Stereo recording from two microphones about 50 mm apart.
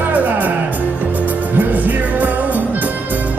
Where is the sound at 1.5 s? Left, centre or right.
Right.